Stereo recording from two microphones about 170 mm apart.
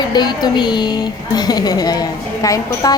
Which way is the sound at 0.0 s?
25° left (ahead or behind).